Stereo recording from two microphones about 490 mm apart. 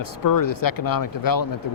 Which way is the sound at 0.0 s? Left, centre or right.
Left.